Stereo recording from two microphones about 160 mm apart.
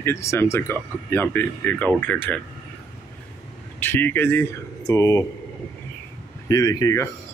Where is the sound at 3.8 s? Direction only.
10° left (ahead or behind).